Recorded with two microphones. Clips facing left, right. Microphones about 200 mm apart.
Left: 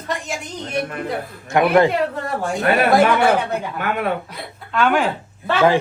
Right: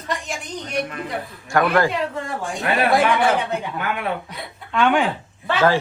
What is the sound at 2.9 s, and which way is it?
Speech, centre (ahead or behind).